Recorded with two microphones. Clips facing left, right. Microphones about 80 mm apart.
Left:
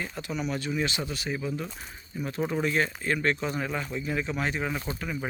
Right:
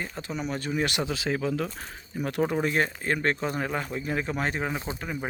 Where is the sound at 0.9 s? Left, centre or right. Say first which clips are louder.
Right 4 dB; right.